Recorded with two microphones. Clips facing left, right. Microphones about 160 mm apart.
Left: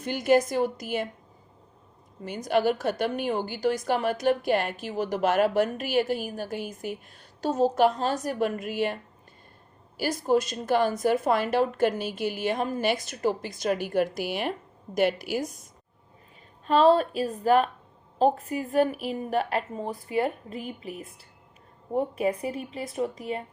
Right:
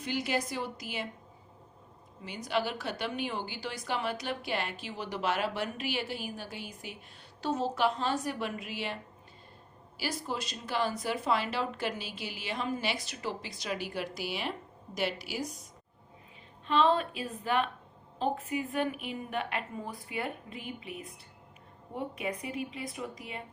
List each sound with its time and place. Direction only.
0.0 s a woman's voice: 50° left (ahead or behind)
2.2 s a woman's voice: 45° left (ahead or behind)
10.0 s a woman's voice: 45° left (ahead or behind)
16.6 s a woman's voice: 40° left (ahead or behind)